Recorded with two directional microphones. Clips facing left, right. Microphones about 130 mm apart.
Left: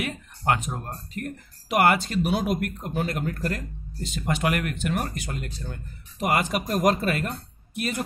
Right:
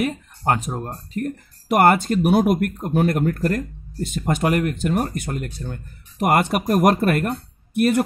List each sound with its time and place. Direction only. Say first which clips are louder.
0.0 s speech: right 5 dB; 40° right (ahead or behind)
1.7 s speech: right 5 dB; 50° right (ahead or behind)
5.2 s speech: right 6 dB; 50° right (ahead or behind)